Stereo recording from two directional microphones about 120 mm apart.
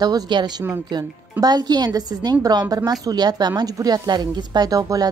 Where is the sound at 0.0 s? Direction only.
35° right (ahead or behind).